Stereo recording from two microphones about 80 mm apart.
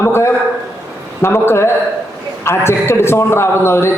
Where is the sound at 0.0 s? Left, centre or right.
Left.